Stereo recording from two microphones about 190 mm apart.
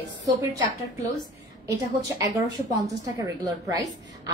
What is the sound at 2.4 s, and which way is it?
A woman's voice, 20° right (ahead or behind).